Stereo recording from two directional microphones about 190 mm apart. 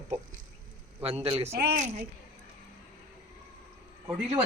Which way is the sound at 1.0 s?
30° right (ahead or behind).